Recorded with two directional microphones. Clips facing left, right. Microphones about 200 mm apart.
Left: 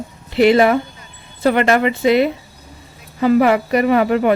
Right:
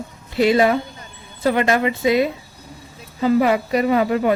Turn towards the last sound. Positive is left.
turn(degrees=65)  # may be behind; listen again after turning